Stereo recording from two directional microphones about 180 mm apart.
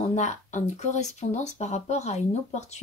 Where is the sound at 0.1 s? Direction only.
40° left (ahead or behind).